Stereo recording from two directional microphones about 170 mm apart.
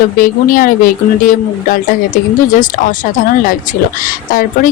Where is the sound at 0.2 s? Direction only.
55° left (ahead or behind).